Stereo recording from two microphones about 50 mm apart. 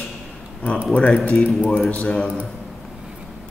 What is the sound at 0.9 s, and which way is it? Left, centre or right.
Speech, left.